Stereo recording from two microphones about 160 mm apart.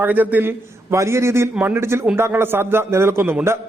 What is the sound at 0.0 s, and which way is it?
A man's voice, 10° right (ahead or behind).